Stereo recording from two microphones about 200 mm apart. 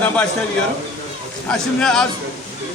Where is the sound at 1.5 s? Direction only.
5° left (ahead or behind).